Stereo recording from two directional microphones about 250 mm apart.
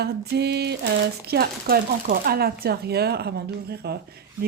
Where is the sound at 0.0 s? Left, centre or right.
Right.